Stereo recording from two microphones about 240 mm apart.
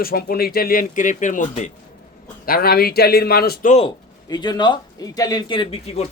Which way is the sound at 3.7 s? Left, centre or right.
Centre.